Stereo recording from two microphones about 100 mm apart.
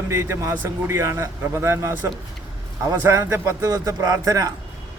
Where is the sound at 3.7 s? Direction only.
35° right (ahead or behind).